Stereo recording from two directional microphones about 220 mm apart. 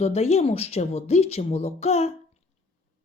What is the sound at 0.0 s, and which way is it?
Speech, 30° left (ahead or behind).